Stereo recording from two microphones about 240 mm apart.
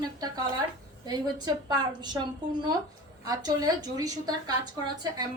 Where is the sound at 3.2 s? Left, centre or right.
Centre.